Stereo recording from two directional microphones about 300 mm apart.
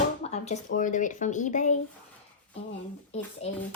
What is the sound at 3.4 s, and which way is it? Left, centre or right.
Speech, centre.